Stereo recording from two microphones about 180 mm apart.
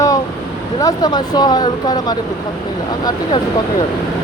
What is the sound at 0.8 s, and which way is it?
Speech, 20° left (ahead or behind).